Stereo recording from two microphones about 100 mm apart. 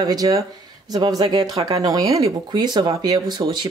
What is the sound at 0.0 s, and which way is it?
Speech, 40° right (ahead or behind).